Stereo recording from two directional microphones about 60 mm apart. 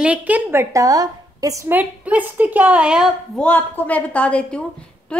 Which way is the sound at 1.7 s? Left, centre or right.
Right.